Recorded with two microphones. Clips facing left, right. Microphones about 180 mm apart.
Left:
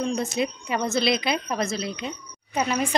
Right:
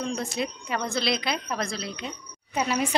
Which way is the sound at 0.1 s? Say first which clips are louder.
Left 4 dB; 20° left (ahead or behind).